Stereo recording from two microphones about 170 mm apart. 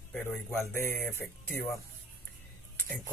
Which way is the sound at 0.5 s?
15° left (ahead or behind).